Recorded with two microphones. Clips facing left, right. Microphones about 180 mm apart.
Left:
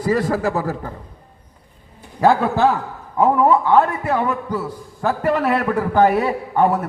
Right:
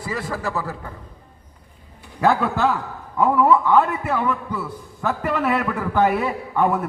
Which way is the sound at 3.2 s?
35° left (ahead or behind).